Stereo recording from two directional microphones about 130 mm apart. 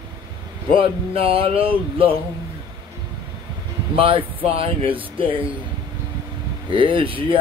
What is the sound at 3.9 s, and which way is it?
Speech, 45° right (ahead or behind).